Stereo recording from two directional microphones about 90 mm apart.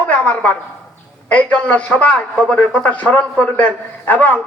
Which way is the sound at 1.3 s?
15° left (ahead or behind).